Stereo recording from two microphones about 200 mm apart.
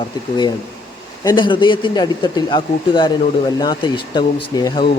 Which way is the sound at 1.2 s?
20° left (ahead or behind).